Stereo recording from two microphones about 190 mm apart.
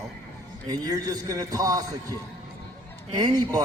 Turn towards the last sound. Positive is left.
turn(degrees=-20)  # may be behind; listen again after turning